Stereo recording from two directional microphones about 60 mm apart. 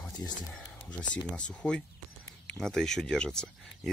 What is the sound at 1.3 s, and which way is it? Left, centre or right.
Speech, centre.